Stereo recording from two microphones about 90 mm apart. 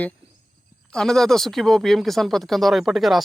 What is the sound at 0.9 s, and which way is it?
Speech, 5° left (ahead or behind).